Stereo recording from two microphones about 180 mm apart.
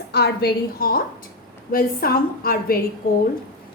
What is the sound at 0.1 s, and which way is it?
A woman's voice, 65° left (ahead or behind).